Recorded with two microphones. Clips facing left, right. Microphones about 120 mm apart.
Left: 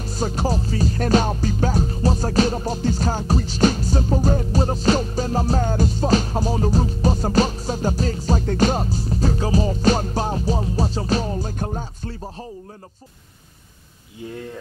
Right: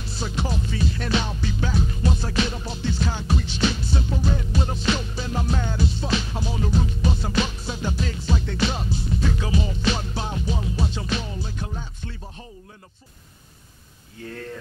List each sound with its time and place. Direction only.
0.0 s music: 45° left (ahead or behind)
14.2 s speech: 15° left (ahead or behind)